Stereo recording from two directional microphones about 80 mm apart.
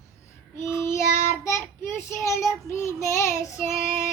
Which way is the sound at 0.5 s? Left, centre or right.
Left.